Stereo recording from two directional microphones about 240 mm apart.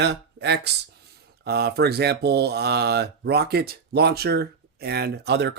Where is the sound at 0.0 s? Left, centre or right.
Right.